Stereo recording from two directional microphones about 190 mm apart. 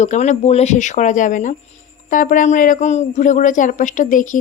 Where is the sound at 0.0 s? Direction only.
35° left (ahead or behind).